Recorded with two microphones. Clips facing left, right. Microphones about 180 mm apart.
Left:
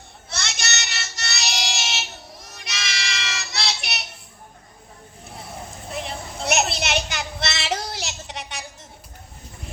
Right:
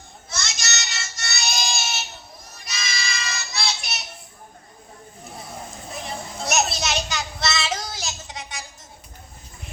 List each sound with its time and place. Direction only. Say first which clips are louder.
0.3 s child singing: left 1 dB; 65° left (ahead or behind)
5.9 s child singing: left 2 dB; 60° left (ahead or behind)